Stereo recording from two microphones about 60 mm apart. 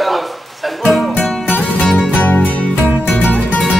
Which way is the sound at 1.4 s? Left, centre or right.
Left.